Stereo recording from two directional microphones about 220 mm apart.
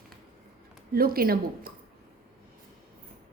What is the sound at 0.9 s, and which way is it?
Speech, 40° right (ahead or behind).